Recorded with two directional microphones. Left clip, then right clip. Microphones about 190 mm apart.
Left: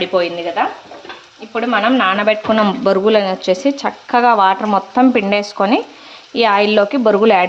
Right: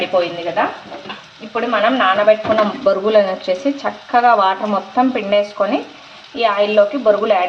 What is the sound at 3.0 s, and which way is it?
Speech, 30° left (ahead or behind).